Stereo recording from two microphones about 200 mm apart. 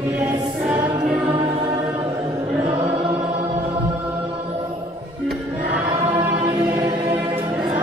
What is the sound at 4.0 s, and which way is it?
Chant, 5° right (ahead or behind).